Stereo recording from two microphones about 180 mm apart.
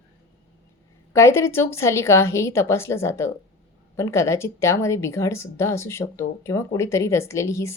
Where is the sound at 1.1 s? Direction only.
15° left (ahead or behind).